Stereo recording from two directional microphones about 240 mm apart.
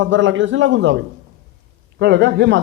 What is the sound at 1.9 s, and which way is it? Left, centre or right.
Speech, right.